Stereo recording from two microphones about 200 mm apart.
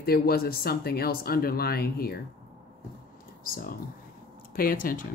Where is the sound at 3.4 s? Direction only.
45° left (ahead or behind).